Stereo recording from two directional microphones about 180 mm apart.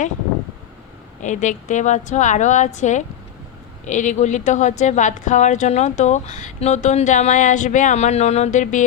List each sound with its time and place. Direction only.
1.2 s a woman's voice: 45° left (ahead or behind)